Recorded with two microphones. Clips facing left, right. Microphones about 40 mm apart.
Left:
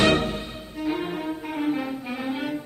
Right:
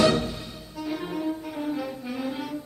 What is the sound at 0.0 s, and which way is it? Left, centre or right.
Music, left.